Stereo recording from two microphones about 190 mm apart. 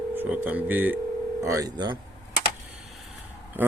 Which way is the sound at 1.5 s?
20° right (ahead or behind).